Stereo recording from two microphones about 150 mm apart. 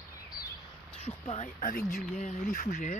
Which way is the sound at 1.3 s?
55° left (ahead or behind).